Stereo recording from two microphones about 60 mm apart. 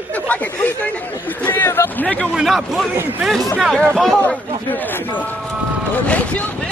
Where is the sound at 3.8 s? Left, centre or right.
Centre.